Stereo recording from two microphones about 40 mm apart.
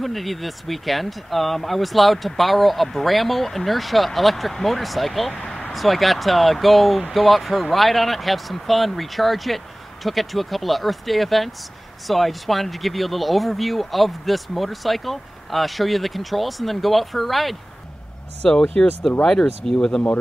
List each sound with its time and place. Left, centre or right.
0.0 s speech: centre
18.5 s speech: centre